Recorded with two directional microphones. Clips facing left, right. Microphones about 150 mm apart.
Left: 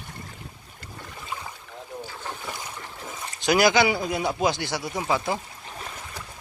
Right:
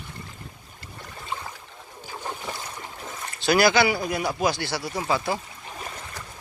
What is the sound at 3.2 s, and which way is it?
Speech, 15° left (ahead or behind).